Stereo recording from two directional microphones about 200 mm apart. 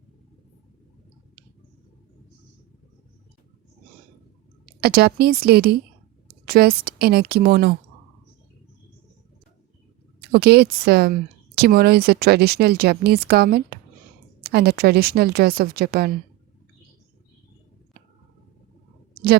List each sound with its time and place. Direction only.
4.8 s speech: 50° right (ahead or behind)
10.2 s speech: 55° right (ahead or behind)